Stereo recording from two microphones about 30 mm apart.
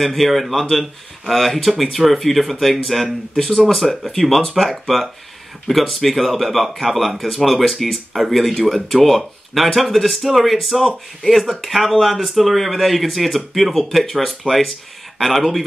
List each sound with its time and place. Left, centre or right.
0.0 s speech: centre
8.1 s speech: centre